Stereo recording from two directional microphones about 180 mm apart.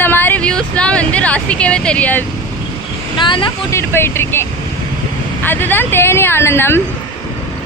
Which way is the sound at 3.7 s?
15° left (ahead or behind).